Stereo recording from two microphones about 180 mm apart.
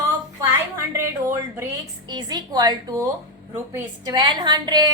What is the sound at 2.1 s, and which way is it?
A woman's voice, 25° right (ahead or behind).